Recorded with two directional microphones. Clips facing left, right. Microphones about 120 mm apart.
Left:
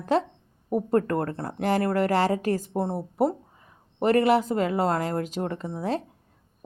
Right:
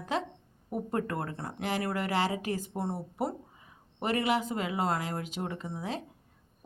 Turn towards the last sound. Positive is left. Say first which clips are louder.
# left 8 dB
turn(degrees=40)  # may be behind; listen again after turning